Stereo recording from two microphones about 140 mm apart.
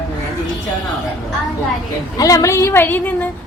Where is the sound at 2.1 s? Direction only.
25° left (ahead or behind).